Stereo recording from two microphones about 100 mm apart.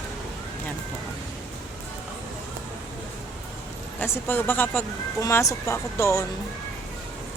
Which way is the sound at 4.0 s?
20° left (ahead or behind).